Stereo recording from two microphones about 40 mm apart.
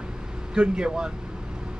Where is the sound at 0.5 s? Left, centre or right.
Right.